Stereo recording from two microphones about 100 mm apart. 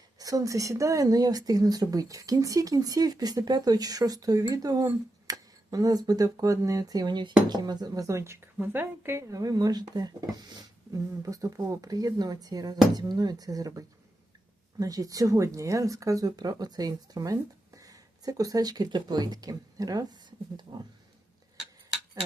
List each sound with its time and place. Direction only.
0.2 s speech: 35° right (ahead or behind)